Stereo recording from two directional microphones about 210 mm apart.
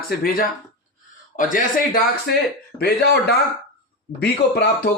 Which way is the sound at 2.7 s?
50° left (ahead or behind).